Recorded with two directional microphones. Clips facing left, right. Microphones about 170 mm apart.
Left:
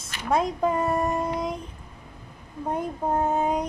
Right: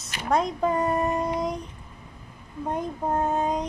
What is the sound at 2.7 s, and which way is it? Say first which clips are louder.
Child singing: left 1 dB; 10° left (ahead or behind).